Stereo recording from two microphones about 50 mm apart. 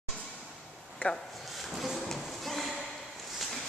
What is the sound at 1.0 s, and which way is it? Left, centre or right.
Speech, left.